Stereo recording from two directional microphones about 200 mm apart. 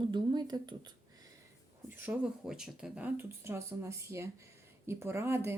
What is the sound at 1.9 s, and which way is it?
Speech, 10° right (ahead or behind).